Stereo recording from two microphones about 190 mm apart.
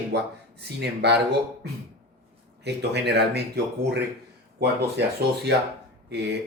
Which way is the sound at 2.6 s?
65° right (ahead or behind).